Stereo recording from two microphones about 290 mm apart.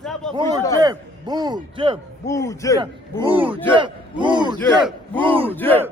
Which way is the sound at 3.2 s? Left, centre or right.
Centre.